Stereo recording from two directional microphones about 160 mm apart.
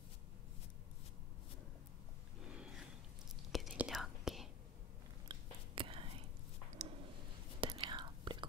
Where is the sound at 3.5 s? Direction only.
5° right (ahead or behind).